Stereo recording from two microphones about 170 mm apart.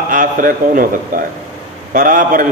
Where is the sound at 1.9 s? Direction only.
55° right (ahead or behind).